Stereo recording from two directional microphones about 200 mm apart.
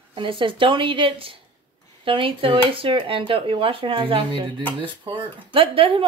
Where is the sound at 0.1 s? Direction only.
25° right (ahead or behind).